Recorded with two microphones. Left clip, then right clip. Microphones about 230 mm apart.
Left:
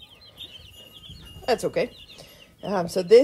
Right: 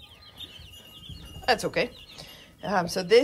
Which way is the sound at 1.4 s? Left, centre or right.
Centre.